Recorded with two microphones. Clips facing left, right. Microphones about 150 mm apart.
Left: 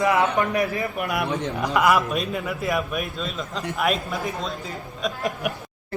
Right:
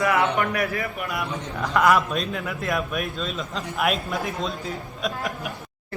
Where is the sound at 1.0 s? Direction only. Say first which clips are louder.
Left 4 dB; 60° left (ahead or behind).